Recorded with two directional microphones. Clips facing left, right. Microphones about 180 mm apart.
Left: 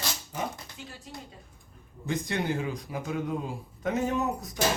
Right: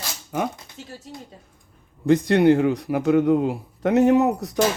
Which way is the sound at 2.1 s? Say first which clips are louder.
Right 14 dB; 65° right (ahead or behind).